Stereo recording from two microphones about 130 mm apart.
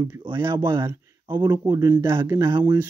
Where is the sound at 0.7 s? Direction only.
35° right (ahead or behind); by 2.4 s 20° right (ahead or behind).